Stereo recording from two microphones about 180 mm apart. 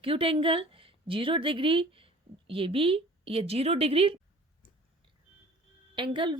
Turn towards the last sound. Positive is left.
turn(degrees=-25)  # may be behind; listen again after turning